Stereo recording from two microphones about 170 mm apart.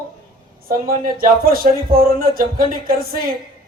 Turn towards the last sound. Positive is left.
turn(degrees=-60)  # may be behind; listen again after turning